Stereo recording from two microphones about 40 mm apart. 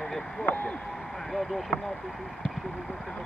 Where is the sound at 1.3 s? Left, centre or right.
Centre.